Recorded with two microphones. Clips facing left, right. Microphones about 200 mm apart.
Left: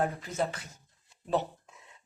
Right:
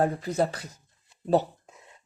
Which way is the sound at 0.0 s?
35° right (ahead or behind).